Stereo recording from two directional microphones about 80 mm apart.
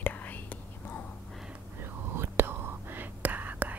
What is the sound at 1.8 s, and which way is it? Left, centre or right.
Whispering, right.